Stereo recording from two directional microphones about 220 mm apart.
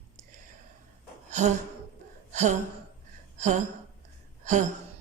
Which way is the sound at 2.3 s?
35° right (ahead or behind).